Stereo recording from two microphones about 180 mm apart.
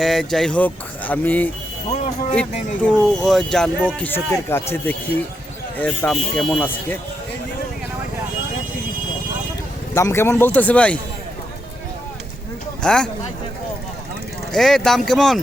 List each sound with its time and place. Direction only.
0.0 s speech: centre (ahead or behind)
1.9 s speech: 40° left (ahead or behind)
2.3 s speech: 5° left (ahead or behind)
5.7 s speech: 10° left (ahead or behind)
9.9 s speech: 15° left (ahead or behind)
12.8 s speech: 5° left (ahead or behind)
14.5 s speech: centre (ahead or behind)